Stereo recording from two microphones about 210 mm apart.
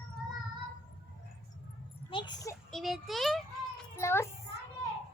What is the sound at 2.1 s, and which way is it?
Speech, 20° left (ahead or behind).